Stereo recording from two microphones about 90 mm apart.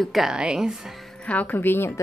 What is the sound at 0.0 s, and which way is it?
Speech, centre (ahead or behind).